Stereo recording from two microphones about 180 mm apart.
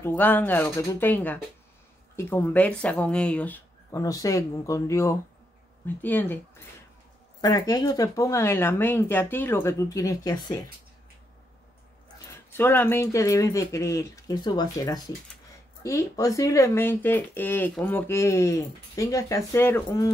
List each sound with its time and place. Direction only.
0.0 s speech: 10° left (ahead or behind)
7.4 s speech: 20° left (ahead or behind)
12.3 s speech: 10° left (ahead or behind)